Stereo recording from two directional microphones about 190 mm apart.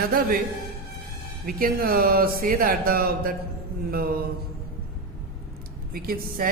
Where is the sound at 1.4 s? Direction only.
50° right (ahead or behind).